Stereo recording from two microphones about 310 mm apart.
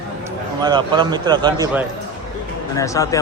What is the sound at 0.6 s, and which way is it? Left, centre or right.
A man's voice, centre.